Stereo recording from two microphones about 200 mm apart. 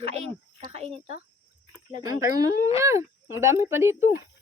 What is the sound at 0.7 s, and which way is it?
Speech, 30° right (ahead or behind).